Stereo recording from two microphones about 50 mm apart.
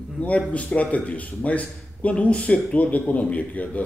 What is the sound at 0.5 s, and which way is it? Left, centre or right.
Speech, left.